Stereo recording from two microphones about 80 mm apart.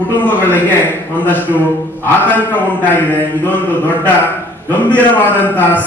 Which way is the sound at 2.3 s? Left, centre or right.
Left.